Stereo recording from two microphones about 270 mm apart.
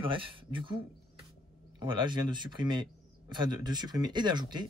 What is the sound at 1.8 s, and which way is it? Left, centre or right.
Speech, centre.